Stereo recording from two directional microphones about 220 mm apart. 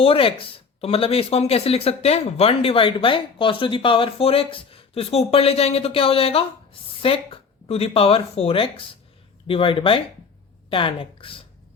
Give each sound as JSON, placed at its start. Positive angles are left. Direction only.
{"t": 0.0, "sound": "speech", "side_deg": 25}